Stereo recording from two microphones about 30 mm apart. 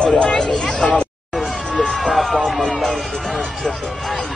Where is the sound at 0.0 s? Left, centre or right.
Left.